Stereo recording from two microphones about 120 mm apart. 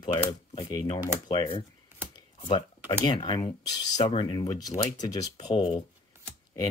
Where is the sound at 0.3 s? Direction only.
35° left (ahead or behind).